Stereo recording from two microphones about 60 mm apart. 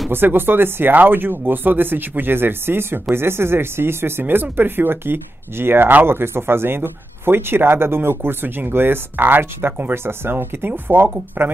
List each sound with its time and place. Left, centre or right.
0.1 s speech: right